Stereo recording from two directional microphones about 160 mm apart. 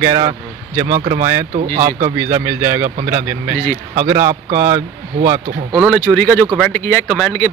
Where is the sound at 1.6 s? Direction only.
55° right (ahead or behind).